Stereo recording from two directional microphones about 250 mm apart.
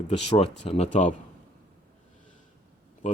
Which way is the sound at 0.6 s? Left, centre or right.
Left.